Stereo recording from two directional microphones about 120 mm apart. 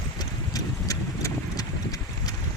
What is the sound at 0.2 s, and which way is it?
Clip-clop, 30° left (ahead or behind).